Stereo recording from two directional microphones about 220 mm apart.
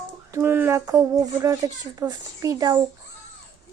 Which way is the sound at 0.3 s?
10° right (ahead or behind).